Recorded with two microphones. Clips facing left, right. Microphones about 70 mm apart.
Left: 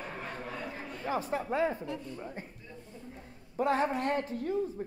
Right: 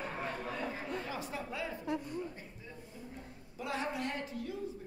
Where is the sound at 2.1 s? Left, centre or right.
Left.